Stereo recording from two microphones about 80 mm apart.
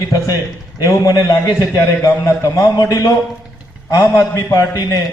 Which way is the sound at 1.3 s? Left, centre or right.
Left.